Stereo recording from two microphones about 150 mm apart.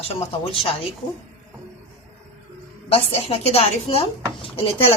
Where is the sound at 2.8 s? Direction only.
40° left (ahead or behind).